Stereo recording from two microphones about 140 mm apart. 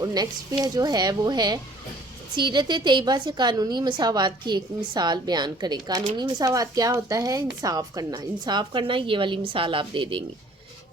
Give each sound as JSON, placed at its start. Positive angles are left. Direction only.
{"t": 0.0, "sound": "a woman's voice", "side_deg": -25}